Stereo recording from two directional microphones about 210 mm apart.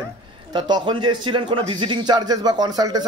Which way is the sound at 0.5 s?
20° right (ahead or behind).